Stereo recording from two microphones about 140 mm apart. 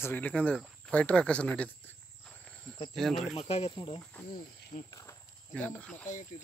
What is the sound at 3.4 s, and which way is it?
Speech, 45° left (ahead or behind).